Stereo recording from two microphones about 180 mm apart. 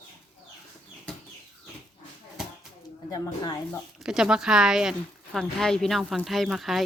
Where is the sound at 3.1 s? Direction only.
20° left (ahead or behind).